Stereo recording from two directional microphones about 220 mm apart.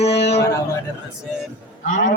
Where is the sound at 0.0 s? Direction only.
30° left (ahead or behind).